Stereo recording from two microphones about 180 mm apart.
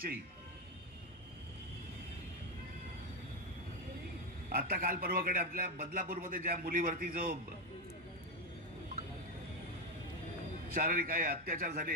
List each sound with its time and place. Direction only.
4.5 s a man's voice: 55° right (ahead or behind)
10.7 s a man's voice: 50° right (ahead or behind)